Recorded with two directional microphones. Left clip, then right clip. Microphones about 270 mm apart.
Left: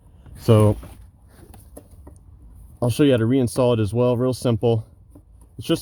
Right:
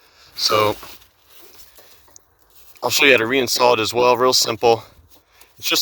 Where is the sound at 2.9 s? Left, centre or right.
Centre.